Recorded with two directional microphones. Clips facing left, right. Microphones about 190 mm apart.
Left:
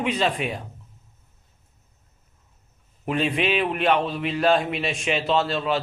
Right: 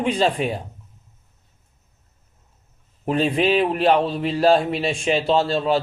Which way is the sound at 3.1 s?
35° right (ahead or behind).